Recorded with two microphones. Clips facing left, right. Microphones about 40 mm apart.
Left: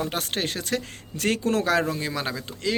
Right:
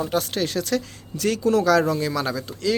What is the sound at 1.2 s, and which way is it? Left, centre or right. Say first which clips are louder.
Speech: right 4 dB; left.